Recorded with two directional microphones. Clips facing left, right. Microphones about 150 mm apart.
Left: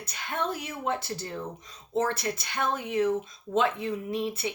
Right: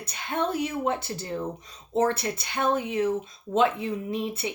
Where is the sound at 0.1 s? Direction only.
25° right (ahead or behind).